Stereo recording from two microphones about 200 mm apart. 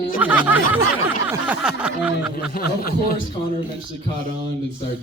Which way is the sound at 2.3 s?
50° left (ahead or behind).